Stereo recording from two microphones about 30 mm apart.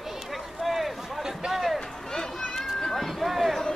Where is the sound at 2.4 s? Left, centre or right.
Left.